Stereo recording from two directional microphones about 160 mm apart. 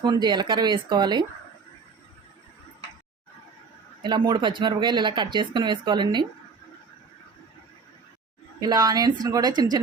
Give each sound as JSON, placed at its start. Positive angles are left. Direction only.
{"t": 0.0, "sound": "speech", "side_deg": -25}
{"t": 4.0, "sound": "speech", "side_deg": -30}
{"t": 8.6, "sound": "speech", "side_deg": -25}